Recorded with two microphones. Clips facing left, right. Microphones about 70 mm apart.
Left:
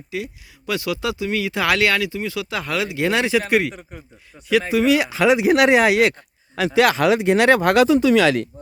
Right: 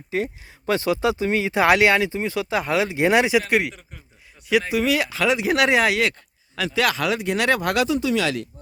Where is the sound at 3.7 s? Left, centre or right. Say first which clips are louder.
Left 8 dB; left.